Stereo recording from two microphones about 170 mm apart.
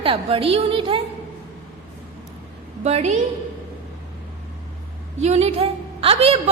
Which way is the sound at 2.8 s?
40° right (ahead or behind).